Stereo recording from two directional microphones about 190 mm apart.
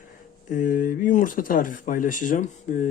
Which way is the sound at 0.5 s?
45° left (ahead or behind).